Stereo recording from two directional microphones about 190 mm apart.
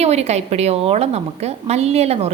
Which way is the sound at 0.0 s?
35° right (ahead or behind).